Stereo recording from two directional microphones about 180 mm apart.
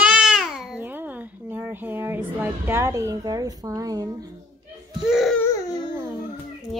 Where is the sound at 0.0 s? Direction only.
5° right (ahead or behind); by 4.1 s 20° right (ahead or behind).